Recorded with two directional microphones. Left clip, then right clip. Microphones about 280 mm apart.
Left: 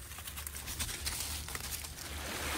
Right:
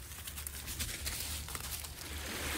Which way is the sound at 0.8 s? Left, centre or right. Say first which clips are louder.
Left 2 dB; centre.